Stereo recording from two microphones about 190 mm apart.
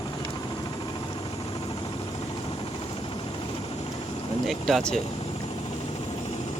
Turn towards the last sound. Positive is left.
turn(degrees=5)  # may be behind; listen again after turning